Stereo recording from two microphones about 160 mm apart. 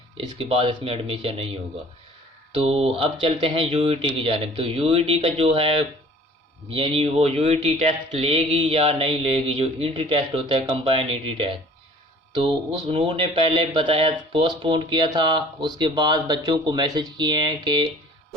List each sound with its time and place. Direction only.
0.2 s speech: 35° right (ahead or behind)
2.6 s speech: 35° right (ahead or behind)